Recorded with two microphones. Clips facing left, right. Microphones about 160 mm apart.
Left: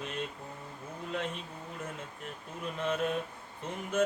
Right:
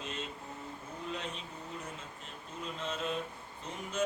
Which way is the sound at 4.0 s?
55° left (ahead or behind).